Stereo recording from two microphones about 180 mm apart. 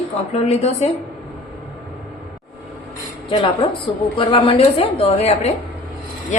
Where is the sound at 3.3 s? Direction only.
25° left (ahead or behind).